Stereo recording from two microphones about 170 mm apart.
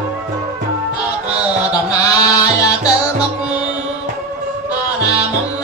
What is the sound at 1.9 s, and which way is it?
Music, 20° left (ahead or behind).